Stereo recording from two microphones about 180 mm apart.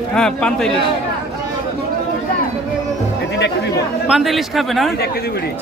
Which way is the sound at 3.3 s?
70° left (ahead or behind).